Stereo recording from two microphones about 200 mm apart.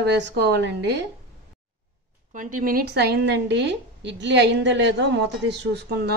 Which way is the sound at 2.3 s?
40° right (ahead or behind).